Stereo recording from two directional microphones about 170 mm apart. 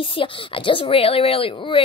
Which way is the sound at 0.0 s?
30° left (ahead or behind).